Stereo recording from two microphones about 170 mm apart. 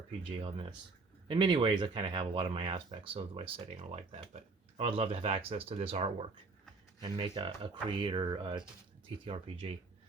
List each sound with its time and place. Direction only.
0.2 s speech: 30° right (ahead or behind)